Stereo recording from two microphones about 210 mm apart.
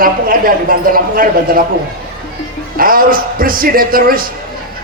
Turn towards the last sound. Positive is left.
turn(degrees=-45)  # may be behind; listen again after turning